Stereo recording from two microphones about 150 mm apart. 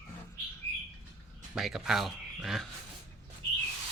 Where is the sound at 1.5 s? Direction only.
5° right (ahead or behind).